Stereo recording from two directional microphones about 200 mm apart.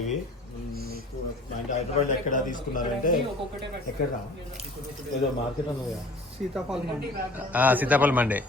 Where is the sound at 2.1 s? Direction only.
40° left (ahead or behind).